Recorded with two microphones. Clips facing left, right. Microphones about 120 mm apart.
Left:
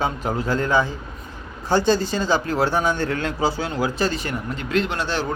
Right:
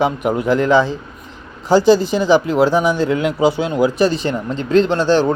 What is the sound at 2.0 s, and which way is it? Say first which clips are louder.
Speech: right 8 dB; 20° right (ahead or behind).